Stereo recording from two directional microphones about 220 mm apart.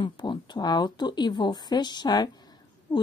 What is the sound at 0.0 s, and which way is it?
Speech, 20° left (ahead or behind).